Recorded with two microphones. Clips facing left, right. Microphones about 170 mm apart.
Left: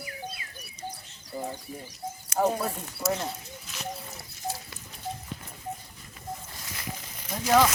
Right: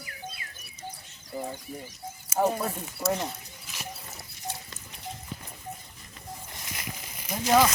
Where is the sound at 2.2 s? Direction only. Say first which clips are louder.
Even; 5° right (ahead or behind).